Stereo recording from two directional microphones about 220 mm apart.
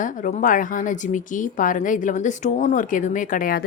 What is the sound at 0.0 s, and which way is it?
Speech, 35° left (ahead or behind).